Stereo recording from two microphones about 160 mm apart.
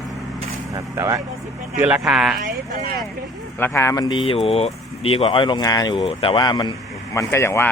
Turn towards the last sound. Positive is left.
turn(degrees=15)  # may be behind; listen again after turning